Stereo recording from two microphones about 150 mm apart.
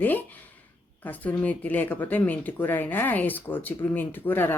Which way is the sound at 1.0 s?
10° left (ahead or behind).